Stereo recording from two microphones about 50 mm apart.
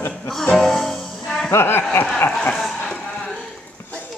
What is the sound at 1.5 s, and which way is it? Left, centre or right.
Speech, left.